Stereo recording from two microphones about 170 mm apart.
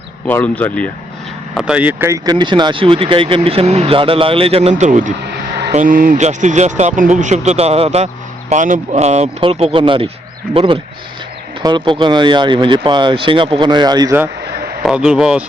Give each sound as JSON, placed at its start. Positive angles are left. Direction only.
{"t": 0.3, "sound": "speech", "side_deg": 10}
{"t": 1.5, "sound": "speech", "side_deg": -5}
{"t": 4.7, "sound": "speech", "side_deg": -50}
{"t": 14.8, "sound": "speech", "side_deg": -5}